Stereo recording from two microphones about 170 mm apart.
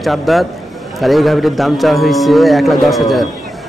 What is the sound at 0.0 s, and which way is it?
A man's voice, centre (ahead or behind).